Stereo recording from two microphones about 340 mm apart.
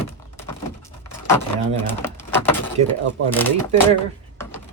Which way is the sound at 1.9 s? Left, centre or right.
Centre.